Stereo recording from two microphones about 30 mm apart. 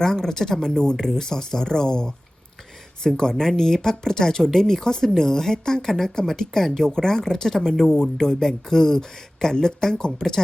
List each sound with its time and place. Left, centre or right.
0.0 s speech: centre
3.2 s speech: left